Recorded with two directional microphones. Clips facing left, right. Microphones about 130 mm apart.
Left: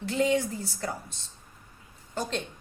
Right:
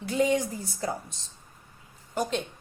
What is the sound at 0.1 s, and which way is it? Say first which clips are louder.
Speech: right 1 dB; 15° right (ahead or behind).